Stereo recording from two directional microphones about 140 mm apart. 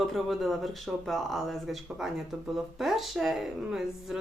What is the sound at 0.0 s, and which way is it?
Speech, centre (ahead or behind).